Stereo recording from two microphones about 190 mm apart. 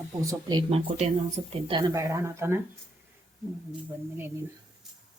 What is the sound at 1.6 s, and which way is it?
Speech, 20° right (ahead or behind).